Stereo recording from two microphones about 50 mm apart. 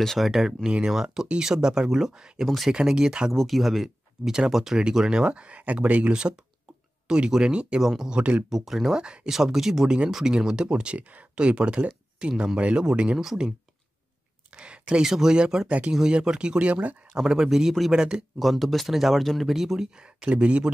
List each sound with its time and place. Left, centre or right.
0.0 s speech: centre
0.3 s speech: centre
2.4 s speech: centre
2.7 s speech: centre
7.8 s speech: centre
8.1 s speech: right
8.5 s speech: centre
9.0 s speech: centre
9.3 s speech: centre
14.5 s speech: right
17.2 s speech: centre
17.9 s speech: centre
18.4 s speech: centre; by 20.7 s right